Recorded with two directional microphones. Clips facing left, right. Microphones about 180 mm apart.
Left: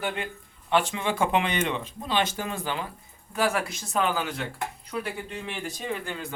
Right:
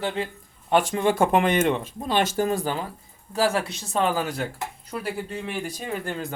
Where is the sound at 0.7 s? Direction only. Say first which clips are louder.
Right 4 dB; 45° right (ahead or behind).